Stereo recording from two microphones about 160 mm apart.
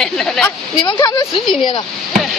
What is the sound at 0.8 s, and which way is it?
Speech, 25° left (ahead or behind).